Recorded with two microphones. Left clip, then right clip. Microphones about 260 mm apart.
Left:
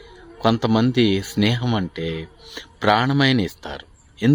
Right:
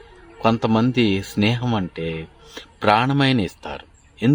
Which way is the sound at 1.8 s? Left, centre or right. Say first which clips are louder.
Even; centre.